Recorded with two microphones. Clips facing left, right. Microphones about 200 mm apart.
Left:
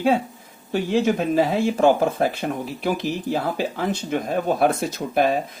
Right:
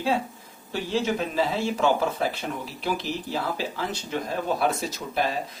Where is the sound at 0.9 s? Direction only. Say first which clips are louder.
Left 6 dB; 50° left (ahead or behind).